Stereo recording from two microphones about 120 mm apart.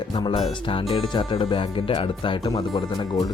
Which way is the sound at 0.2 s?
40° left (ahead or behind).